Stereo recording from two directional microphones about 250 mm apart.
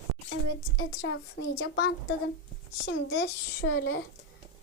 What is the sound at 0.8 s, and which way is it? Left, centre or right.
A child's voice, left.